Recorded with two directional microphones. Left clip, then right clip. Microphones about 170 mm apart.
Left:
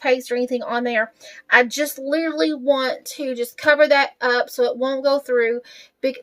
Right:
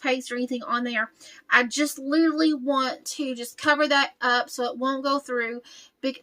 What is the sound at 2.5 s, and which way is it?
A woman's voice, 20° left (ahead or behind).